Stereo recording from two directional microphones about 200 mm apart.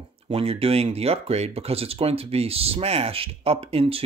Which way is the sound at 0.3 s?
30° right (ahead or behind).